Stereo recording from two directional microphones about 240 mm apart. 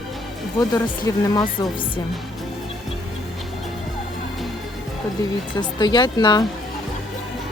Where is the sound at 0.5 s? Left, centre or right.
Centre.